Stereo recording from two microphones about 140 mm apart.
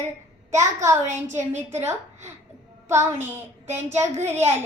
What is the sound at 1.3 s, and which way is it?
Speech, 15° right (ahead or behind).